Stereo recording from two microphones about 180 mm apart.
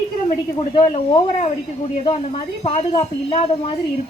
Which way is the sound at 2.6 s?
35° left (ahead or behind).